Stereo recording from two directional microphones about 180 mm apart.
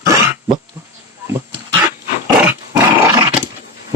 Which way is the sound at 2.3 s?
15° right (ahead or behind).